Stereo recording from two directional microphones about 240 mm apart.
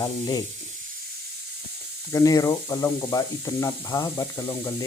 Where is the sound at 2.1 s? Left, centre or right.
Centre.